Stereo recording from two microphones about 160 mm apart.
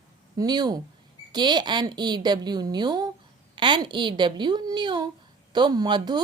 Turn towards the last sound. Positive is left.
turn(degrees=-25)  # may be behind; listen again after turning